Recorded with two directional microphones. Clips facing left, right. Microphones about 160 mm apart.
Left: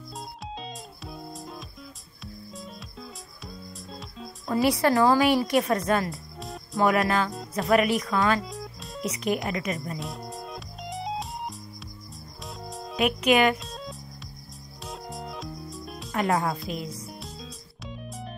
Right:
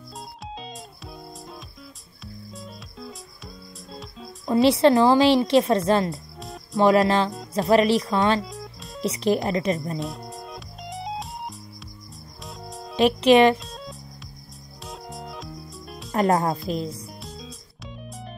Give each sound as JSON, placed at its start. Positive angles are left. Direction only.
{"t": 0.6, "sound": "music", "side_deg": 0}
{"t": 4.5, "sound": "a woman's voice", "side_deg": -25}
{"t": 6.4, "sound": "music", "side_deg": 0}
{"t": 6.8, "sound": "a woman's voice", "side_deg": -30}
{"t": 8.5, "sound": "music", "side_deg": 0}
{"t": 9.0, "sound": "speech", "side_deg": -30}
{"t": 9.9, "sound": "music", "side_deg": 0}
{"t": 12.9, "sound": "a woman's voice", "side_deg": -30}
{"t": 14.9, "sound": "music", "side_deg": 0}
{"t": 16.1, "sound": "speech", "side_deg": -40}
{"t": 17.2, "sound": "music", "side_deg": 0}